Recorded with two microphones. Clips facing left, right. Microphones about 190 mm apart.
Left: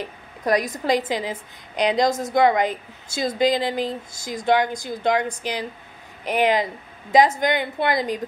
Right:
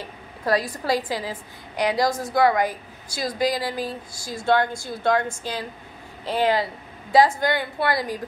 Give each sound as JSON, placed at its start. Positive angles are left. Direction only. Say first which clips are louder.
{"t": 0.0, "sound": "a woman's voice", "louder": "left 2 dB", "side_deg": 20}